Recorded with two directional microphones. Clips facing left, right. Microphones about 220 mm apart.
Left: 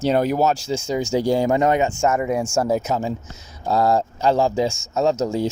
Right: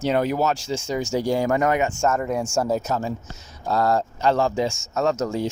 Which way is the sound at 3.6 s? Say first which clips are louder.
Left 3 dB; 30° left (ahead or behind).